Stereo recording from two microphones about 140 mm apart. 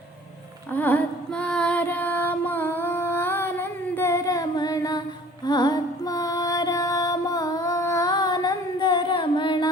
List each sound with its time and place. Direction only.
0.7 s female singing: 10° left (ahead or behind); by 5.0 s 30° left (ahead or behind)
5.5 s music: 30° left (ahead or behind)